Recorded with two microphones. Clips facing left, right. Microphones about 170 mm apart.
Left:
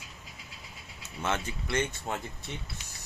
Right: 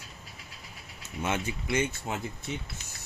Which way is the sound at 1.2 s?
10° right (ahead or behind).